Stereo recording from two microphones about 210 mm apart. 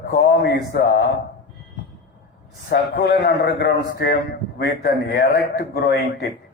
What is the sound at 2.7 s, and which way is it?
A man's voice, 50° left (ahead or behind).